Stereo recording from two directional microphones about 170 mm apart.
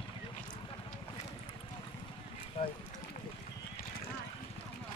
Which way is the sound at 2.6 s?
35° left (ahead or behind).